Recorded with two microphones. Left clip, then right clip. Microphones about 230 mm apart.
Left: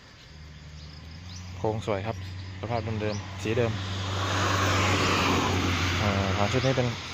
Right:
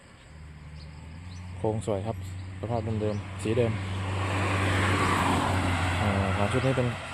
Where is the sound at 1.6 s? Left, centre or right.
Centre.